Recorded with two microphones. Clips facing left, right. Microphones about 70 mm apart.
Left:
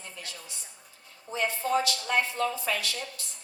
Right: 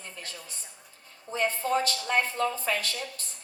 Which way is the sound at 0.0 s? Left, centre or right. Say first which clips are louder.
Right 1 dB; right.